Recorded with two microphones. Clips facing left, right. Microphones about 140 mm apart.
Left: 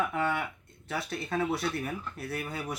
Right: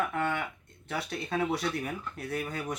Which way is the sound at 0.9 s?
Centre (ahead or behind).